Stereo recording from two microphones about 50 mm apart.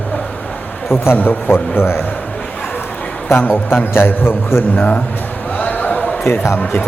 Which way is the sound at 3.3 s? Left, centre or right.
Left.